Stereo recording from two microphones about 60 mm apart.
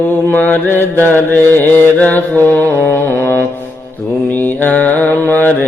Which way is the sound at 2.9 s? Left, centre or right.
Left.